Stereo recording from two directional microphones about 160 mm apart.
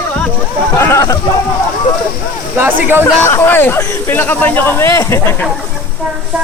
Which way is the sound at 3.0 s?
15° left (ahead or behind).